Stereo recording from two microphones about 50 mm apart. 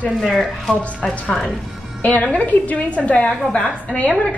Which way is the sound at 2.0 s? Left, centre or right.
Left.